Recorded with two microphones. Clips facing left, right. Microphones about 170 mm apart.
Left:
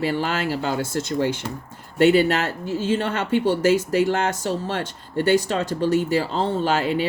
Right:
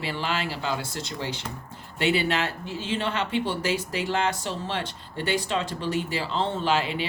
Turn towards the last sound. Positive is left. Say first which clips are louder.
# left 4 dB
turn(degrees=45)  # may be behind; listen again after turning